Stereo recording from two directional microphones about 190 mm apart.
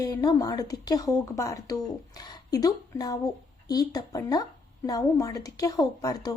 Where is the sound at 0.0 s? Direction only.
20° left (ahead or behind).